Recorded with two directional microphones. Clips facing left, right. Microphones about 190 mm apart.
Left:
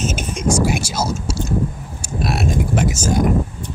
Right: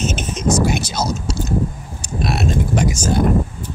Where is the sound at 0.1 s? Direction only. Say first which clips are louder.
Right 1 dB; 10° left (ahead or behind).